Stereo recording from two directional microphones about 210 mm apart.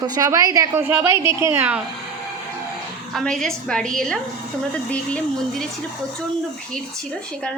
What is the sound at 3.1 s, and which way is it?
A woman's voice, centre (ahead or behind).